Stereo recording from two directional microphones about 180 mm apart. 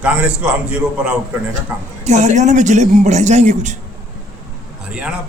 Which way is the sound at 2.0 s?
40° right (ahead or behind).